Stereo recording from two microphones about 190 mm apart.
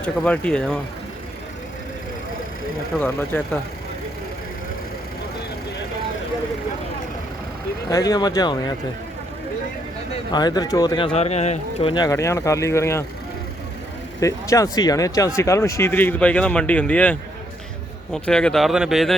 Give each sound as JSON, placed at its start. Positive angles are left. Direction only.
{"t": 0.0, "sound": "speech", "side_deg": 5}
{"t": 2.9, "sound": "speech", "side_deg": 10}
{"t": 7.9, "sound": "speech", "side_deg": 20}
{"t": 10.3, "sound": "speech", "side_deg": 20}
{"t": 12.0, "sound": "speech", "side_deg": 15}
{"t": 14.2, "sound": "speech", "side_deg": 15}